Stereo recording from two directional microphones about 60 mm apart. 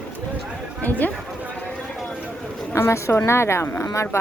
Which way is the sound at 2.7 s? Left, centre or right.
Left.